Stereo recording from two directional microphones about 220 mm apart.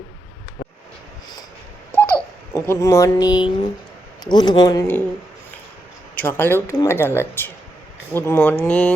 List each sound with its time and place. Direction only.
1.9 s babbling: 10° left (ahead or behind)
2.6 s speech: 15° left (ahead or behind)
6.1 s speech: 10° left (ahead or behind)